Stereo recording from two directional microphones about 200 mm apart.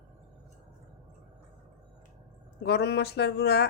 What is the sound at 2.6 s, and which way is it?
Speech, 55° left (ahead or behind).